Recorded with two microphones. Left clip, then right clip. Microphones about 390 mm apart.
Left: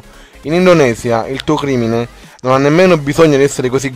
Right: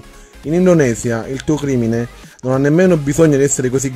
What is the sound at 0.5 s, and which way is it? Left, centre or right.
Speech, left.